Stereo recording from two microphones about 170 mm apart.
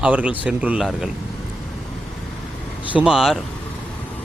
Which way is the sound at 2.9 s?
5° right (ahead or behind).